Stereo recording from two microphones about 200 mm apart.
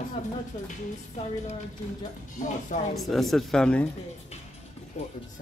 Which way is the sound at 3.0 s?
Centre (ahead or behind).